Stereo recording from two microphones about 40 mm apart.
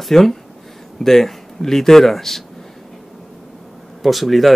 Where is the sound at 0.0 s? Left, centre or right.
Centre.